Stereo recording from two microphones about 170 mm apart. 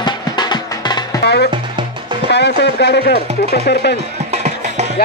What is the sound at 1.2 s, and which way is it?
Music, 75° left (ahead or behind).